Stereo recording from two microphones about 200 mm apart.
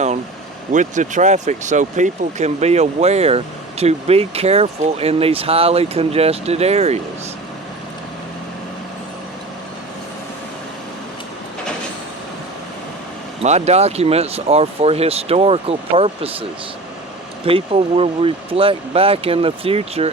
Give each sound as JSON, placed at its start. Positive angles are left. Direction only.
{"t": 0.7, "sound": "speech", "side_deg": -40}
{"t": 13.4, "sound": "speech", "side_deg": -35}